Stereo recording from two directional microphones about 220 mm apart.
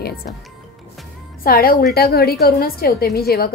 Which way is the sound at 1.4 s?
40° left (ahead or behind).